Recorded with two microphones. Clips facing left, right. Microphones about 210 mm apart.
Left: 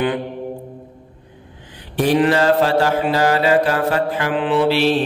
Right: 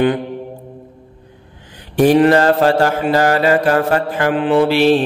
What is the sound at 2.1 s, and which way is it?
Mantra, 50° right (ahead or behind).